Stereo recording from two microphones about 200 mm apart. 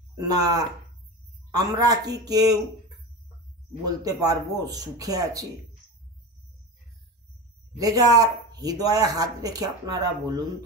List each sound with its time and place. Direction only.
0.1 s speech: 20° right (ahead or behind)
3.8 s speech: 20° right (ahead or behind)
7.7 s speech: 15° right (ahead or behind)